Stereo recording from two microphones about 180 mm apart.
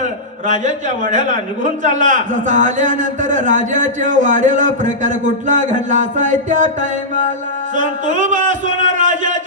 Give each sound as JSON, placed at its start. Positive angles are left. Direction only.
{"t": 0.0, "sound": "a man's voice", "side_deg": -45}
{"t": 7.8, "sound": "a man's voice", "side_deg": -45}